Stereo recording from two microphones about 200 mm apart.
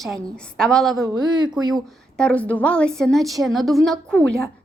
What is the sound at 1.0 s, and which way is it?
Speech, 20° right (ahead or behind).